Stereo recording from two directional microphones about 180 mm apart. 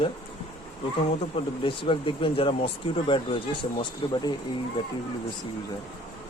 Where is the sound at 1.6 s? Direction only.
30° left (ahead or behind).